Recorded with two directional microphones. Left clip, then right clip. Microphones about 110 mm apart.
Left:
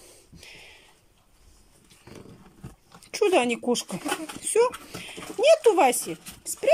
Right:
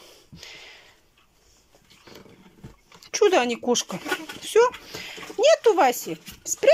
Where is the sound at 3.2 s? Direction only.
10° left (ahead or behind).